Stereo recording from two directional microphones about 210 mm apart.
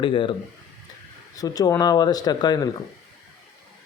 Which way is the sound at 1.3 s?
15° left (ahead or behind).